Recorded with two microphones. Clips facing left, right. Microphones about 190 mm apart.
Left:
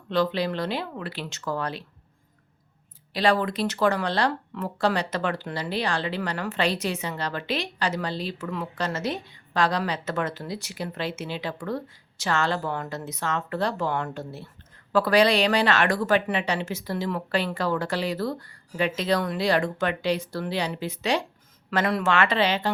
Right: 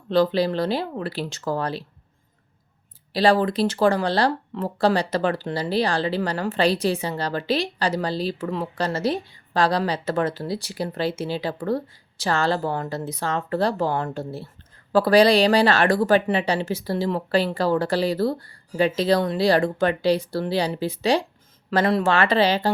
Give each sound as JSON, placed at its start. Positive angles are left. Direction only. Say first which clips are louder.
{"t": 0.1, "sound": "speech", "louder": "right 5 dB", "side_deg": -35}
{"t": 3.1, "sound": "speech", "louder": "right 4 dB", "side_deg": -35}